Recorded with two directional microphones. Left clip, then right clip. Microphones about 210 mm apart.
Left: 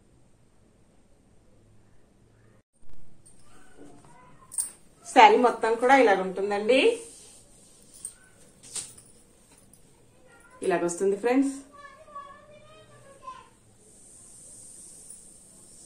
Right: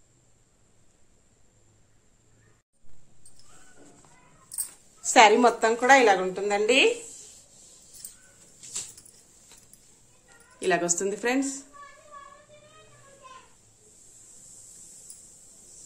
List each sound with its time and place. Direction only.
5.0 s a woman's voice: 50° right (ahead or behind)
10.6 s a woman's voice: 45° right (ahead or behind)